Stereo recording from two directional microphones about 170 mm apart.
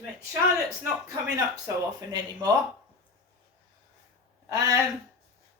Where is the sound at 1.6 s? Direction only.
20° right (ahead or behind).